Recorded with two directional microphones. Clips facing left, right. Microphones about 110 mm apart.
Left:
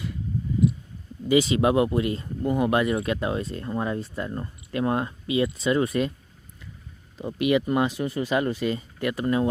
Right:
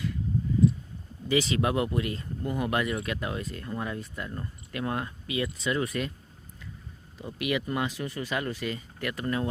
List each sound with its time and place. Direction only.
1.3 s speech: 20° left (ahead or behind)
7.2 s speech: 25° left (ahead or behind)